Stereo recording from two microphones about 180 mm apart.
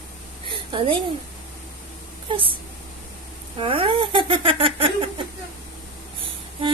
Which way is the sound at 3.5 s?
30° right (ahead or behind).